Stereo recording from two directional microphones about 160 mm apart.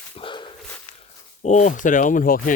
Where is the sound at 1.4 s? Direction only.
50° left (ahead or behind).